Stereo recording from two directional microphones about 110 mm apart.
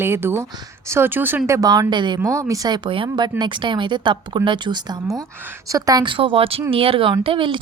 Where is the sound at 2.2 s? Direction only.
30° right (ahead or behind).